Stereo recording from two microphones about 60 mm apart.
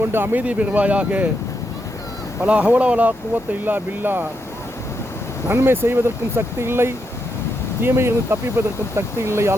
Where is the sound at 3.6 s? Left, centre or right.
Right.